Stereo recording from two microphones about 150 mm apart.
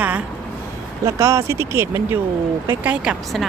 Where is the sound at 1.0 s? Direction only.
20° right (ahead or behind).